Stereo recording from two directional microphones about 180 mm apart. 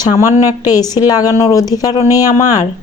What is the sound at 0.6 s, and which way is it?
Speech, 20° left (ahead or behind).